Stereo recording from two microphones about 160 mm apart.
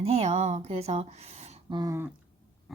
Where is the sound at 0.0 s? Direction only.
40° right (ahead or behind).